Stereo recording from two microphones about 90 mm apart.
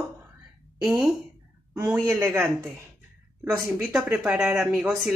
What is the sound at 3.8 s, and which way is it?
Speech, 15° right (ahead or behind).